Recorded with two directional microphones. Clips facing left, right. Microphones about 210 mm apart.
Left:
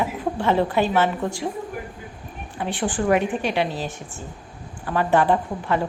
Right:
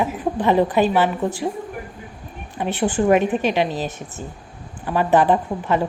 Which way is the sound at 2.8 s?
20° right (ahead or behind).